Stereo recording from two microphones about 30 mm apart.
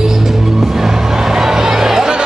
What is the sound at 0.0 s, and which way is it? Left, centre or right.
Music, centre.